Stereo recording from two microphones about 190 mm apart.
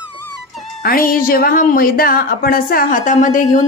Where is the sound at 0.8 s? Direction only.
50° left (ahead or behind).